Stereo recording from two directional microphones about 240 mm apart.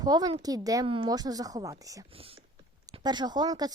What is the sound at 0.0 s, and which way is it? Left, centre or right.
A woman's voice, centre.